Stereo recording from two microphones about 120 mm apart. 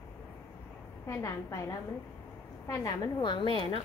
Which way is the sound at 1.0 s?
25° left (ahead or behind).